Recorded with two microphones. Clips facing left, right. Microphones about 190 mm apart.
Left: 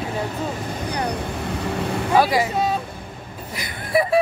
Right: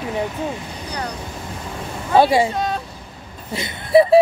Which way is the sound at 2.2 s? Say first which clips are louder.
Right 5 dB; 25° right (ahead or behind).